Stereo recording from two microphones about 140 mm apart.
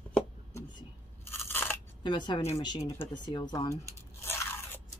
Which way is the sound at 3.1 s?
30° left (ahead or behind).